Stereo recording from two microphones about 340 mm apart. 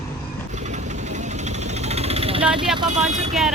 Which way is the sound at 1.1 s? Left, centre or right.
Centre.